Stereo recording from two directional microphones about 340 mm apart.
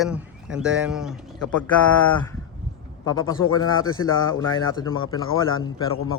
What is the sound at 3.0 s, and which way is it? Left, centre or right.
Speech, centre.